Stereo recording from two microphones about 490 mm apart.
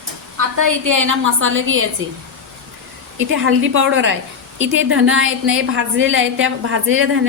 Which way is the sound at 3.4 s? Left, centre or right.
Right.